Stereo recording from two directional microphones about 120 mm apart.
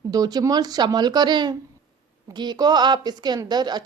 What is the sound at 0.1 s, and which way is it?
A woman's voice, 30° right (ahead or behind).